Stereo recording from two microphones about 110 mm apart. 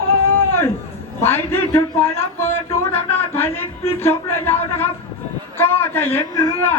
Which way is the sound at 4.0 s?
20° left (ahead or behind).